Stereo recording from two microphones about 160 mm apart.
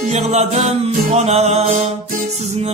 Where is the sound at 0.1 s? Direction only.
45° right (ahead or behind).